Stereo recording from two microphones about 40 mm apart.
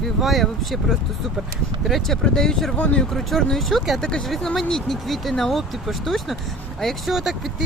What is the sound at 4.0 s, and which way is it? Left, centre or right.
Speech, left.